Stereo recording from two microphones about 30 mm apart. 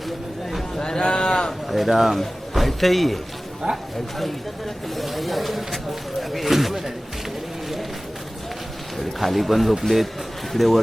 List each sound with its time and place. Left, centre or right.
0.8 s a sound: left
1.6 s a man's voice: centre
3.6 s speech: centre
4.9 s speech: centre
9.0 s speech: centre